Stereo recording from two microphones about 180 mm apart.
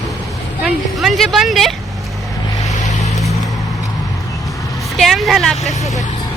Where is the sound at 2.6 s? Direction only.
40° left (ahead or behind).